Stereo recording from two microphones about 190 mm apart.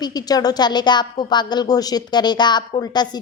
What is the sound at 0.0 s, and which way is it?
A woman's voice, 20° left (ahead or behind).